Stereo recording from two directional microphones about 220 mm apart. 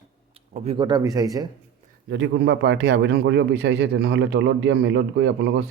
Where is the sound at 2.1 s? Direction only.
55° right (ahead or behind).